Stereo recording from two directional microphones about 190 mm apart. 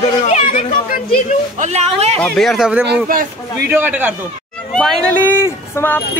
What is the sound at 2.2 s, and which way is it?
Speech, 5° left (ahead or behind).